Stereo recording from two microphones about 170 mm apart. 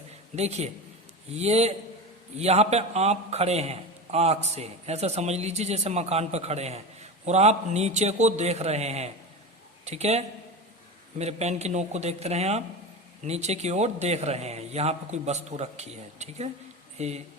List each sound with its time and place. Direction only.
0.3 s a man's voice: 40° right (ahead or behind)